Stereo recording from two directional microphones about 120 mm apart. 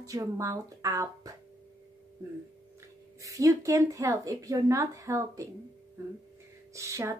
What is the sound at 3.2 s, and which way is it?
Speech, 25° right (ahead or behind).